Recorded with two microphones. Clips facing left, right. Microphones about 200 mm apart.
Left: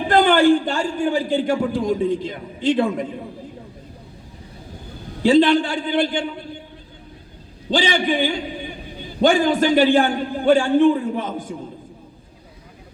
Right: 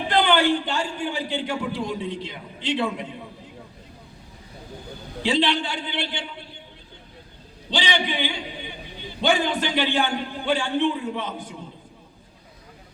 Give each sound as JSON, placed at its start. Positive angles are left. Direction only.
{"t": 0.1, "sound": "a man's voice", "side_deg": 50}
{"t": 5.2, "sound": "a man's voice", "side_deg": 50}
{"t": 7.7, "sound": "a man's voice", "side_deg": 50}